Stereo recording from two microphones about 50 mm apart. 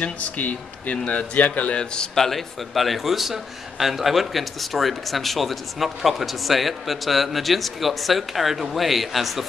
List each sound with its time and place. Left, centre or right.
0.0 s speech: left
2.1 s speech: centre